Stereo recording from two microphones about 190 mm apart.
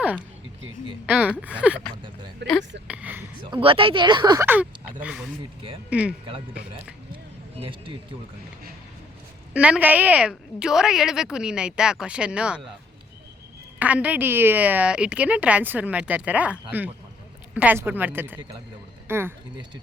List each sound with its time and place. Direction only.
1.0 s a woman's voice: 5° right (ahead or behind)
2.4 s speech: 65° right (ahead or behind)
2.8 s a woman's voice: 5° right (ahead or behind)
3.4 s speech: 25° right (ahead or behind)
4.4 s a woman's voice: 10° right (ahead or behind)
7.6 s speech: 25° right (ahead or behind)
9.5 s a woman's voice: 5° right (ahead or behind)
13.7 s a woman's voice: 10° right (ahead or behind)